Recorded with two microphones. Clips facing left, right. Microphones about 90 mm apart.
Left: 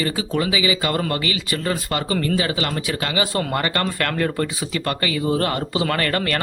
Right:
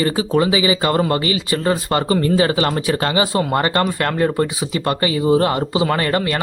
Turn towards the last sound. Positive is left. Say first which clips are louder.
# right 3 dB
turn(degrees=-20)  # may be behind; listen again after turning